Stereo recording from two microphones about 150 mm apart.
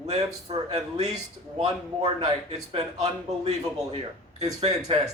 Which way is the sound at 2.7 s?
45° right (ahead or behind).